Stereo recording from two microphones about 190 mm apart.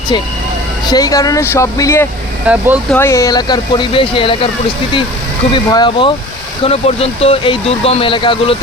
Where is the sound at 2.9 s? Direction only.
15° left (ahead or behind).